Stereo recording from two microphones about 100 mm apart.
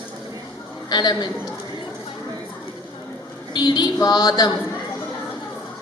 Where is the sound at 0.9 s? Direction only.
45° left (ahead or behind).